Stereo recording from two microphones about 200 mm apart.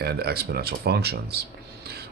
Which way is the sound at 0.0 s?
55° right (ahead or behind).